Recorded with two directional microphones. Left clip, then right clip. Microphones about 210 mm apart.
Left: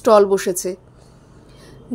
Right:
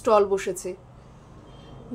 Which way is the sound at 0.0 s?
40° left (ahead or behind).